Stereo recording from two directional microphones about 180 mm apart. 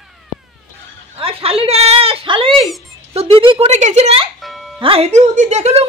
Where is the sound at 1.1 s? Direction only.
30° right (ahead or behind).